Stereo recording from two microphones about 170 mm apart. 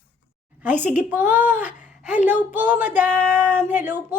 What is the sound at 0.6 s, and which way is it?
A woman's voice, 10° right (ahead or behind).